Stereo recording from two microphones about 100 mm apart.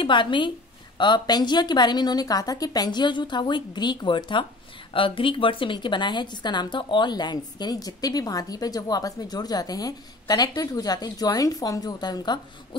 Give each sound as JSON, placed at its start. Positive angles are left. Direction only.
{"t": 0.0, "sound": "a woman's voice", "side_deg": 55}